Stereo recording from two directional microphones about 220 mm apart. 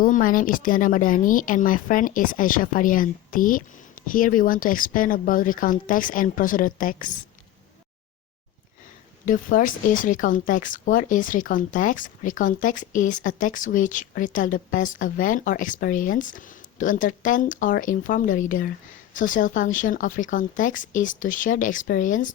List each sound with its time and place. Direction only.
0.0 s speech: 40° left (ahead or behind)
9.2 s speech: 40° left (ahead or behind)